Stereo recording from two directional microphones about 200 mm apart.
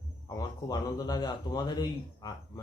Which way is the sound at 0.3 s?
20° left (ahead or behind).